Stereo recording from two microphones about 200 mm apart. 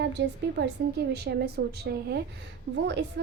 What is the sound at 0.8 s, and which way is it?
A woman's voice, 50° right (ahead or behind).